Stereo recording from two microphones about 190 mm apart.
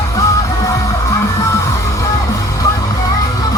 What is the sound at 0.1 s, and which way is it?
Music, 15° left (ahead or behind).